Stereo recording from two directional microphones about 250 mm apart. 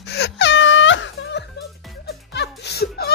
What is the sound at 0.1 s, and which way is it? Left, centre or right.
Wail, left.